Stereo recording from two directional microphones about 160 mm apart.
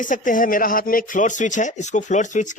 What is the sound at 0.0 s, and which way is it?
Speech, 55° left (ahead or behind).